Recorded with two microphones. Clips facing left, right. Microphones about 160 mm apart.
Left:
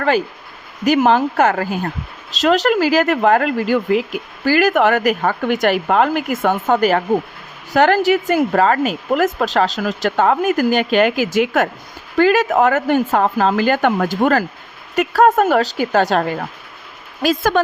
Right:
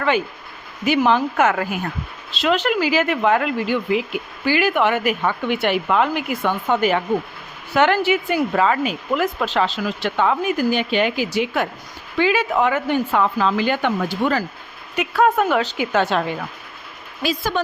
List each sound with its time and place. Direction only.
0.9 s speech: 45° left (ahead or behind)